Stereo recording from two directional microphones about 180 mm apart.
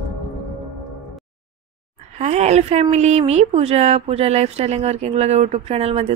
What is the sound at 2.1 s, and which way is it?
A woman's voice, 40° right (ahead or behind).